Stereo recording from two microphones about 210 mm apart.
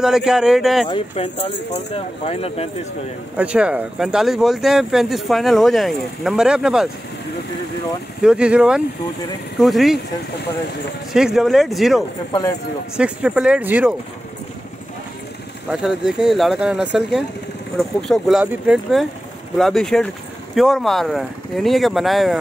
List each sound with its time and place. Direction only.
0.0 s speech: centre (ahead or behind)
0.8 s speech: 25° left (ahead or behind)
3.3 s speech: 5° right (ahead or behind)
8.2 s speech: 5° right (ahead or behind)
11.1 s speech: centre (ahead or behind)
12.3 s speech: 15° left (ahead or behind)
12.9 s speech: 5° right (ahead or behind)
15.7 s speech: 5° right (ahead or behind)